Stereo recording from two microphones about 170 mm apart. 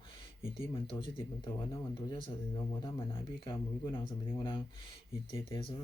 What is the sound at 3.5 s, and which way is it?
Speech, 30° left (ahead or behind).